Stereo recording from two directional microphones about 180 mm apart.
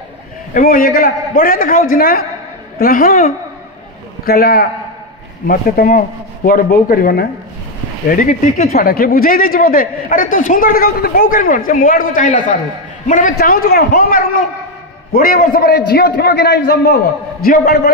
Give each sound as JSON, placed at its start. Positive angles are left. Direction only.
{"t": 0.6, "sound": "a man's voice", "side_deg": 55}